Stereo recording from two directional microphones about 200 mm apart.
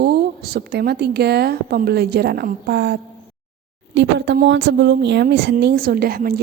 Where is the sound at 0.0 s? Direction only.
50° right (ahead or behind).